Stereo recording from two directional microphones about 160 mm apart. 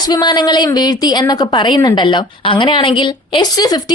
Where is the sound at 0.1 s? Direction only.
25° left (ahead or behind).